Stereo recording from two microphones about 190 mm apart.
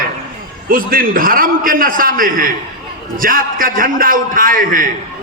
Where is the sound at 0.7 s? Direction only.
50° right (ahead or behind).